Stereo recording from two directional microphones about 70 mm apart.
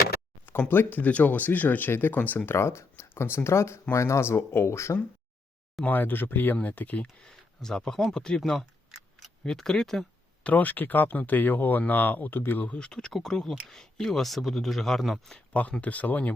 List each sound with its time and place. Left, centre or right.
0.4 s speech: left
5.8 s speech: left
7.3 s speech: centre
9.4 s speech: centre
10.4 s speech: left
12.8 s speech: centre
15.8 s speech: left